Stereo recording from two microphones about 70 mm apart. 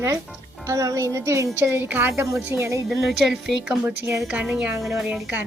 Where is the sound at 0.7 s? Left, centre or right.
Right.